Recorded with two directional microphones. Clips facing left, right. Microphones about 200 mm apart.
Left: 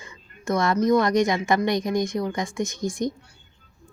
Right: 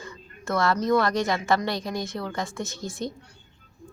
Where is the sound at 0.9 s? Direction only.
15° left (ahead or behind).